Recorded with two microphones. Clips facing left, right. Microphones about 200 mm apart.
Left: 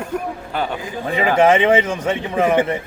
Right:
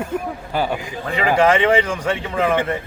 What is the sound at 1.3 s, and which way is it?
A man's voice, 20° left (ahead or behind).